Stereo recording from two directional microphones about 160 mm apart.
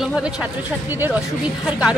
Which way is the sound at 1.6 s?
5° right (ahead or behind).